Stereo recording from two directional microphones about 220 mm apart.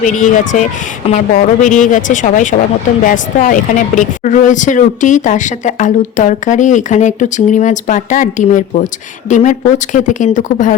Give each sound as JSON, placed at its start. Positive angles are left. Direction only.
{"t": 0.0, "sound": "speech", "side_deg": 35}